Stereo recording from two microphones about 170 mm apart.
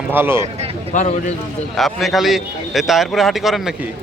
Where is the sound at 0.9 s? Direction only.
45° left (ahead or behind).